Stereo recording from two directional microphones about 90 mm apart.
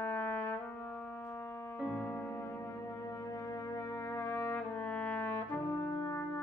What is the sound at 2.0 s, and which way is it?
Music, 20° left (ahead or behind).